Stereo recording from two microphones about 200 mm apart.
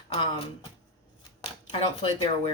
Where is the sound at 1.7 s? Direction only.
30° left (ahead or behind).